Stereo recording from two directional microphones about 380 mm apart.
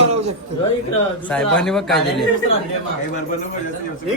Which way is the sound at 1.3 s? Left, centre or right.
Centre.